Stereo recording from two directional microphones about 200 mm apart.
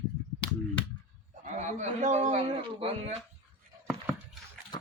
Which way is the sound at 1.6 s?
35° right (ahead or behind).